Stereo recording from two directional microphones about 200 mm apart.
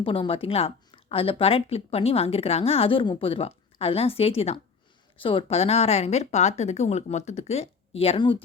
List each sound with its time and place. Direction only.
0.0 s speech: 25° left (ahead or behind)